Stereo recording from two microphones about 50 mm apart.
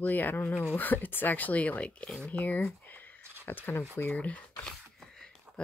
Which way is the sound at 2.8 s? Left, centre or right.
Left.